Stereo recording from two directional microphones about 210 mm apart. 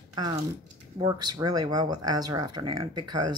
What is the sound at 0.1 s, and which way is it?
Speech, 20° right (ahead or behind).